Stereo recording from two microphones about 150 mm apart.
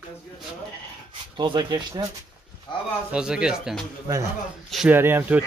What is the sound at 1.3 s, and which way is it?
Speech, 30° right (ahead or behind).